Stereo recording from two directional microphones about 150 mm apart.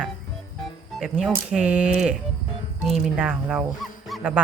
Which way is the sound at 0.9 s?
5° right (ahead or behind).